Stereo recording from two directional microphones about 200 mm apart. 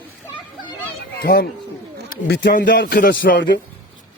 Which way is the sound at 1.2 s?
50° left (ahead or behind).